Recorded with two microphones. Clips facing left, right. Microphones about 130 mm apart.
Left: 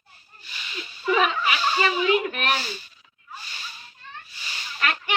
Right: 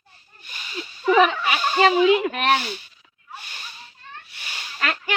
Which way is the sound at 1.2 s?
60° right (ahead or behind).